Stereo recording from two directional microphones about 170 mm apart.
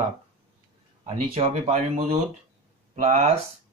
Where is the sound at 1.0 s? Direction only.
40° right (ahead or behind).